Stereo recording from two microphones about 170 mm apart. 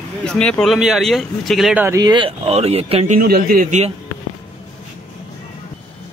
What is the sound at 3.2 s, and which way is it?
Speech, 60° right (ahead or behind).